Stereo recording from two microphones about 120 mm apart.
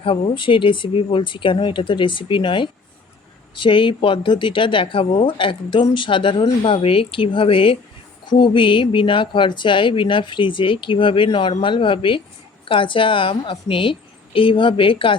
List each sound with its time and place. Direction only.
0.0 s speech: 50° left (ahead or behind)